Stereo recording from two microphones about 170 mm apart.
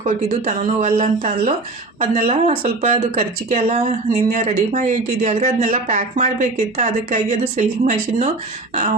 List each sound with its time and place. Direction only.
0.0 s speech: 40° right (ahead or behind)